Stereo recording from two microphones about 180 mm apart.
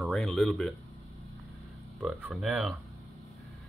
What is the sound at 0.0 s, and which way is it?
Speech, centre (ahead or behind).